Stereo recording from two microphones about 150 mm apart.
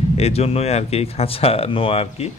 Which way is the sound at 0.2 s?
45° left (ahead or behind).